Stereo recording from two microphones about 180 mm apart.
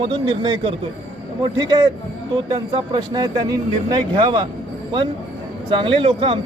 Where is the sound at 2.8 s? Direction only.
25° right (ahead or behind).